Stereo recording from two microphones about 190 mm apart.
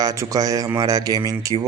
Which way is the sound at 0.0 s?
20° right (ahead or behind).